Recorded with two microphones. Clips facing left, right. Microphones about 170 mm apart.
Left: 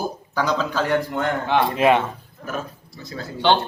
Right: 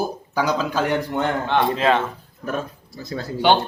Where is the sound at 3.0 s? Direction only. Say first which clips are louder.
Right 5 dB; 35° right (ahead or behind).